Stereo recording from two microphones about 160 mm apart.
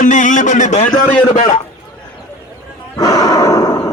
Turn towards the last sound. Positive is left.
turn(degrees=20)  # may be behind; listen again after turning